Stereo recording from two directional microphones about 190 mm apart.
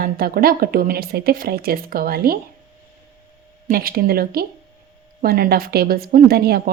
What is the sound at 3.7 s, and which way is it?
A woman's voice, 50° right (ahead or behind).